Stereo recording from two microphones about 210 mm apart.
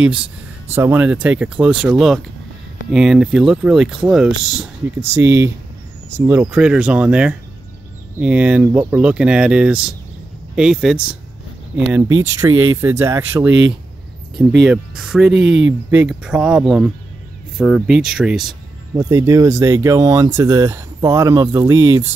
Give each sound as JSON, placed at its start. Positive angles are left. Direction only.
{"t": 0.0, "sound": "speech", "side_deg": -5}
{"t": 5.1, "sound": "speech", "side_deg": -15}
{"t": 13.5, "sound": "speech", "side_deg": -60}
{"t": 14.6, "sound": "speech", "side_deg": -5}
{"t": 18.9, "sound": "speech", "side_deg": -15}